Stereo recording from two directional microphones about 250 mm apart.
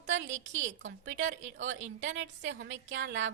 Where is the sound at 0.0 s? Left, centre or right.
Right.